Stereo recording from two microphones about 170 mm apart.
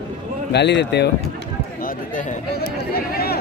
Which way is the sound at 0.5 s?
85° left.